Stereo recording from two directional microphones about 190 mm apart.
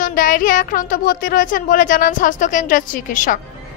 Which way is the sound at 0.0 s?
45° left (ahead or behind).